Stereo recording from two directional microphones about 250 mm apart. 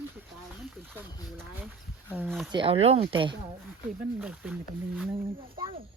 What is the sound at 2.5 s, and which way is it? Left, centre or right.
Speech, right.